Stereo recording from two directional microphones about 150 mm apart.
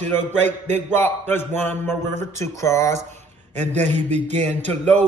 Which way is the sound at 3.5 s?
50° right (ahead or behind).